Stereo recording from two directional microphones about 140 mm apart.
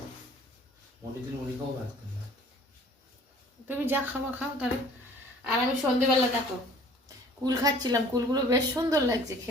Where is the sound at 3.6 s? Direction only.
15° right (ahead or behind).